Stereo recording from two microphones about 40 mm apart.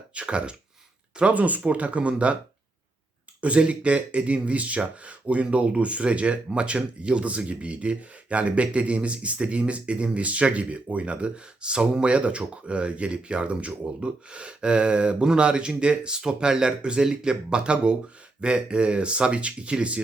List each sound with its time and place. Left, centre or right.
0.1 s speech: right
1.3 s speech: right
3.4 s speech: right